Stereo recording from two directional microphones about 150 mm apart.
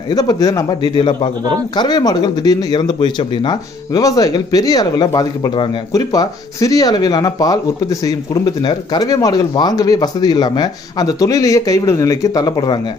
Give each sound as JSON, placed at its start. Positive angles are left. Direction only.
{"t": 0.1, "sound": "speech", "side_deg": 25}